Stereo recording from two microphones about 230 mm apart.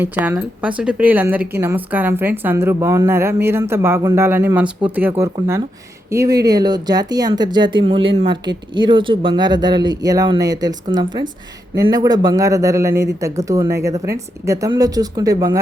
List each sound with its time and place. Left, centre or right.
0.0 s a woman's voice: centre